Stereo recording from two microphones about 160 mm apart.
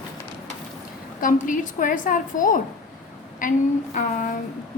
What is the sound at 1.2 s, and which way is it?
A woman's voice, 55° left (ahead or behind).